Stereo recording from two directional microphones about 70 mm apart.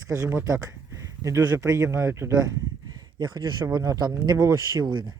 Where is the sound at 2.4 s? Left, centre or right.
Right.